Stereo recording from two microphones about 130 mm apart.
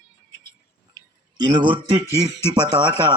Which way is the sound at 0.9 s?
35° right (ahead or behind).